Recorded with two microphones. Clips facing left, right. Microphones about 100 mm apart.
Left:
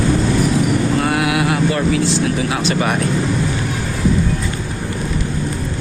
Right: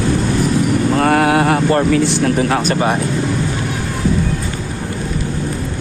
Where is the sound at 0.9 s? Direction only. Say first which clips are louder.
Right 4 dB; 50° right (ahead or behind).